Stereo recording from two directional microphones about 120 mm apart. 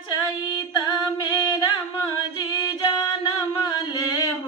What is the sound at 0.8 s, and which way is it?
Music, 40° left (ahead or behind).